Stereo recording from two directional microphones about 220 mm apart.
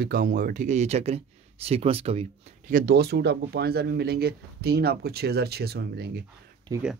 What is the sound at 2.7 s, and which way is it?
Speech, 45° right (ahead or behind).